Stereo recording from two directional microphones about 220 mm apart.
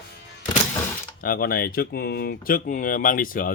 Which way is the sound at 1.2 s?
40° left (ahead or behind).